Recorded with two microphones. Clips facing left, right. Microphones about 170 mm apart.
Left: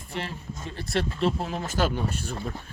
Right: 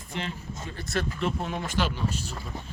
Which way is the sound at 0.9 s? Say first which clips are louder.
Left 3 dB; 30° left (ahead or behind).